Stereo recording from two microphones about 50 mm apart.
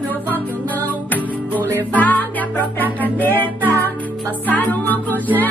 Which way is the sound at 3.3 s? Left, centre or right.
Left.